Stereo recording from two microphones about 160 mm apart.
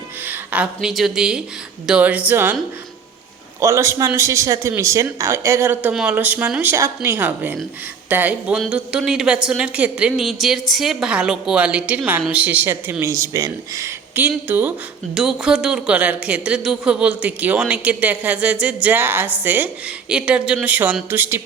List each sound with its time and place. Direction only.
0.3 s speech: 10° right (ahead or behind)
3.6 s a man's voice: 20° right (ahead or behind)